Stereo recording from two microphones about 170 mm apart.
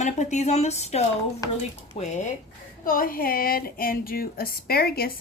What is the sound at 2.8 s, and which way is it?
Speech, 55° left (ahead or behind).